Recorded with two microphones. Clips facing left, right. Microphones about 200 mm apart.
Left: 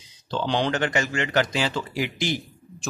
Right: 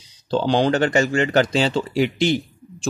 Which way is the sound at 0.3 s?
35° right (ahead or behind).